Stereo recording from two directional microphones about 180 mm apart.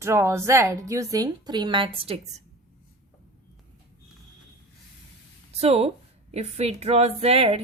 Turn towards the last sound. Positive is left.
turn(degrees=-35)  # may be behind; listen again after turning